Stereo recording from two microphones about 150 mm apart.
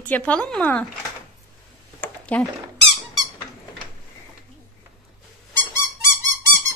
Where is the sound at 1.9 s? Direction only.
10° left (ahead or behind).